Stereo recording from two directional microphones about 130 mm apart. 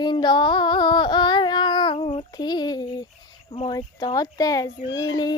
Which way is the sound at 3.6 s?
30° left (ahead or behind).